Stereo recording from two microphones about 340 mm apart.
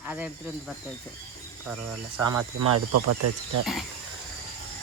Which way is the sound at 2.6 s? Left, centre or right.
Right.